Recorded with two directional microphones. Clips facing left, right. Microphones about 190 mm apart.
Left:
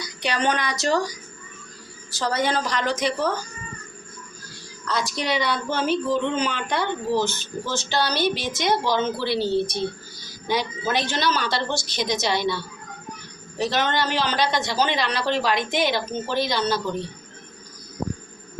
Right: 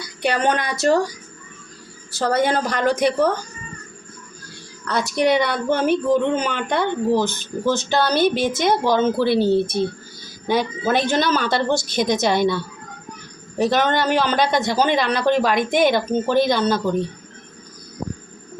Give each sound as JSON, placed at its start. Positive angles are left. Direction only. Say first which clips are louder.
{"t": 0.0, "sound": "speech", "louder": "right 4 dB", "side_deg": -55}
{"t": 2.1, "sound": "a woman's voice", "louder": "right 5 dB", "side_deg": -55}
{"t": 4.9, "sound": "a woman's voice", "louder": "right 7 dB", "side_deg": -55}